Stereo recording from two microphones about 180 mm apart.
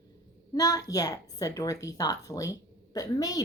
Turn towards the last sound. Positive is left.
turn(degrees=20)  # may be behind; listen again after turning